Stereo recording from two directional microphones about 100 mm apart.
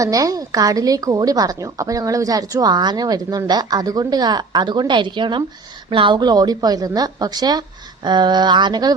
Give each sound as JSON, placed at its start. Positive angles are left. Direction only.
{"t": 0.0, "sound": "a woman's voice", "side_deg": -35}